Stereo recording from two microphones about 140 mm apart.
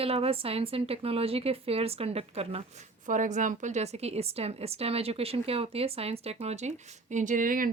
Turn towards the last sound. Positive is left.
turn(degrees=-80)